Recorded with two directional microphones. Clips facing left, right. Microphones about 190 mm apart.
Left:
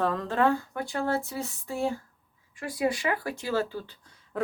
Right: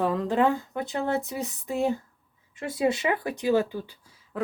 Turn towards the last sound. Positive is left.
turn(degrees=-5)  # may be behind; listen again after turning